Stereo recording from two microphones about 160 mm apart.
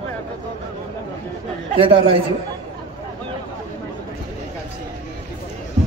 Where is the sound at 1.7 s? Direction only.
35° right (ahead or behind).